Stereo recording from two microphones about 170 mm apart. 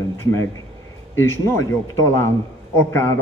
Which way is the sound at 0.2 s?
15° left (ahead or behind).